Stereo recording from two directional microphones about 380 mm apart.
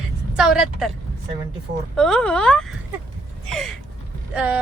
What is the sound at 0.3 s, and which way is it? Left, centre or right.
Speech, centre.